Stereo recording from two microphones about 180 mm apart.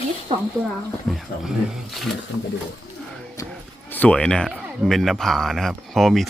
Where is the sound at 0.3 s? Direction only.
25° right (ahead or behind).